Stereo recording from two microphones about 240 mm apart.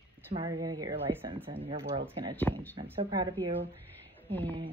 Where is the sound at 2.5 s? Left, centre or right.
Centre.